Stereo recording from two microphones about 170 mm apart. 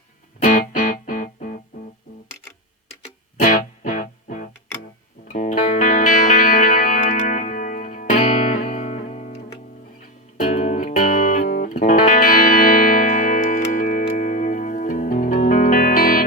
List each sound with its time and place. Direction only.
0.4 s music: 50° left (ahead or behind)
3.3 s music: 50° left (ahead or behind)
10.4 s music: 40° left (ahead or behind)